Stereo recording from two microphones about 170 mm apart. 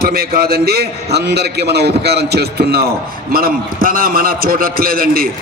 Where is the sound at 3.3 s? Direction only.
60° right (ahead or behind).